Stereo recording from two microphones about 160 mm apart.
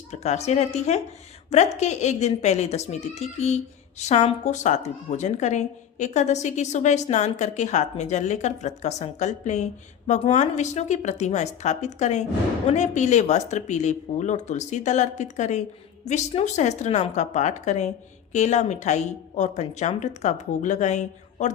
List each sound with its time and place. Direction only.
0.1 s speech: 45° left (ahead or behind)